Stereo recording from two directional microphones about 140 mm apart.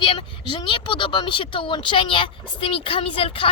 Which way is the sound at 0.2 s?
35° left (ahead or behind).